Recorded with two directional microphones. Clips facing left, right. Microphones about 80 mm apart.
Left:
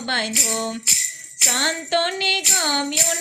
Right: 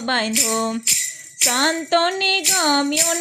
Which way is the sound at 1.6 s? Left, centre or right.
Right.